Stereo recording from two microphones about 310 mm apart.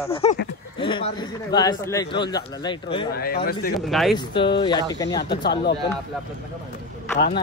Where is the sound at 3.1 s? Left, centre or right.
Left.